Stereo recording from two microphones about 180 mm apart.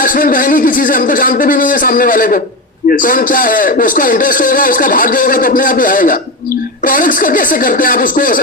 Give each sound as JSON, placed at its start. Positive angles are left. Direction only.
{"t": 0.0, "sound": "a man's voice", "side_deg": 50}